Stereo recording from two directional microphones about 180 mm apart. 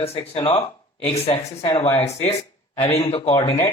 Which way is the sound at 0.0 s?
35° left (ahead or behind).